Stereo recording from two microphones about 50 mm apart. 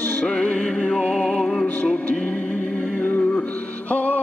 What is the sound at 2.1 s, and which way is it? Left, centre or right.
Music, left.